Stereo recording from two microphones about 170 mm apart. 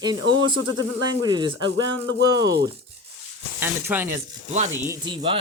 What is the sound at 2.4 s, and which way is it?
Chopping, 80° right.